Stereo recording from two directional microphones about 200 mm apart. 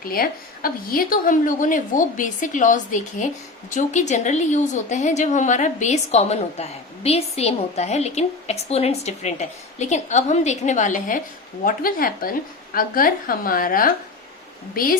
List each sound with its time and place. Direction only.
0.0 s a woman's voice: 45° left (ahead or behind)